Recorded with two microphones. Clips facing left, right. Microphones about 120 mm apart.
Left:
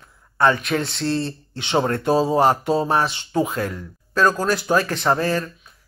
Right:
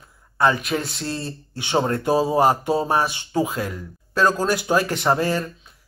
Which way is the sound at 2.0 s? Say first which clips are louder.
Left 1 dB; 15° right (ahead or behind).